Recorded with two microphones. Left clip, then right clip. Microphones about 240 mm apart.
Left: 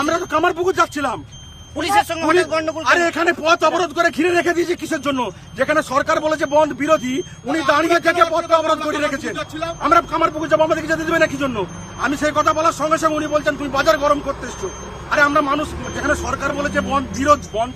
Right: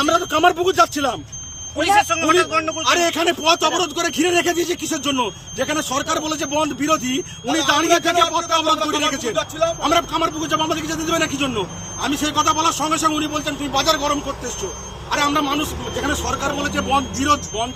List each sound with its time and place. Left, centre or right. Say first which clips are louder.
0.0 s a man's voice: right 2 dB; centre
9.3 s a man's voice: right 5 dB; centre
9.8 s a man's voice: left 7 dB; centre